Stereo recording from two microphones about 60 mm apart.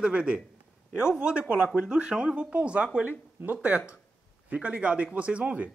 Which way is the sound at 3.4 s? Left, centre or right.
Right.